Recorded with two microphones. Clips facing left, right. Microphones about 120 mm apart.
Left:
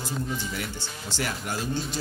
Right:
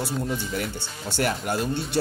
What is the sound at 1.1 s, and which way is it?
Speech, 55° right (ahead or behind).